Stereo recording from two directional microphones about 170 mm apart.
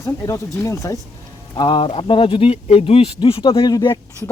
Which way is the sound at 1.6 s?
30° left (ahead or behind).